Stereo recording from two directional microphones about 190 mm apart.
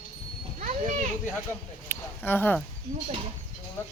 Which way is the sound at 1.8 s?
10° left (ahead or behind).